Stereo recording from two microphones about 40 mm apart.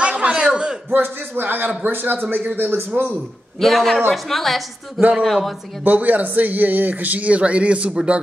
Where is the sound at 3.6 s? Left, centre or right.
Centre.